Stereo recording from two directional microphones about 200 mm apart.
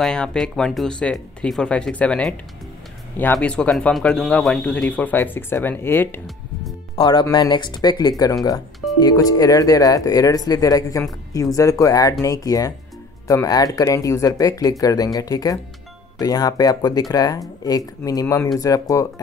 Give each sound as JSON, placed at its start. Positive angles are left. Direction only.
{"t": 0.0, "sound": "speech", "side_deg": 5}
{"t": 7.0, "sound": "speech", "side_deg": 20}